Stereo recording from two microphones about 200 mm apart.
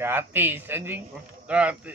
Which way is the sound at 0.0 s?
10° right (ahead or behind).